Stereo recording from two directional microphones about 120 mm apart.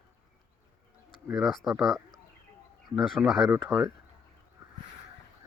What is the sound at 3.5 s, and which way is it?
Speech, 20° right (ahead or behind).